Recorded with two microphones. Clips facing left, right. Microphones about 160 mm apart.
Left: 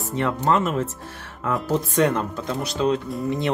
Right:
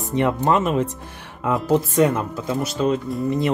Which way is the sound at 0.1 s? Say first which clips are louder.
Right 3 dB; 20° right (ahead or behind).